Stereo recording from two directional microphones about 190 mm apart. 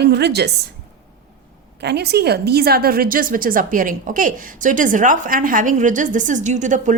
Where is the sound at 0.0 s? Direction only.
60° right (ahead or behind).